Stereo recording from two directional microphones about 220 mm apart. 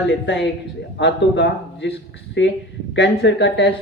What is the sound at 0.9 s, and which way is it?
Speech, 55° left (ahead or behind).